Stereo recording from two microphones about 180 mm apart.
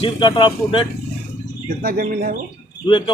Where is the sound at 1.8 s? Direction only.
55° right (ahead or behind).